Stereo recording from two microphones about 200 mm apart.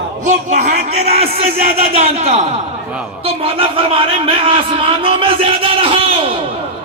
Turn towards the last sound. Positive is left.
turn(degrees=-25)  # may be behind; listen again after turning